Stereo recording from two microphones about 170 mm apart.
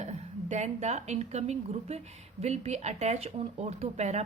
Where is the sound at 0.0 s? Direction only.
40° right (ahead or behind).